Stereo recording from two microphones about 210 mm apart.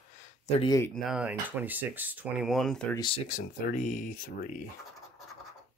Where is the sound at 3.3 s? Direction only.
40° left (ahead or behind).